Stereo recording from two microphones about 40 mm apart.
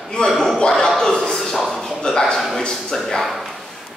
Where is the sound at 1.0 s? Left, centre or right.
Centre.